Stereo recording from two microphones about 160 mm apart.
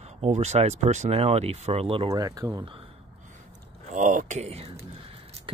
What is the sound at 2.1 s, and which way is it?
Speech, 20° right (ahead or behind).